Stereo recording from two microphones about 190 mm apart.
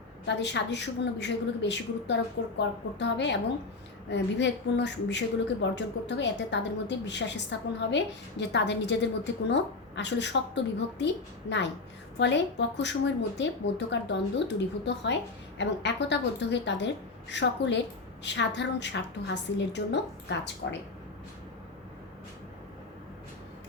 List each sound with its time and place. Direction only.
0.3 s a woman's voice: 70° left (ahead or behind)